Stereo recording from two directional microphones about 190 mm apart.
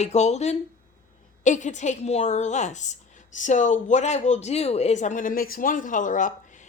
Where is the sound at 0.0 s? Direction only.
35° left (ahead or behind).